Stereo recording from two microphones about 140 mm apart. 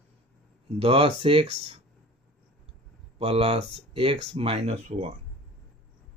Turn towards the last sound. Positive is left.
turn(degrees=-50)  # may be behind; listen again after turning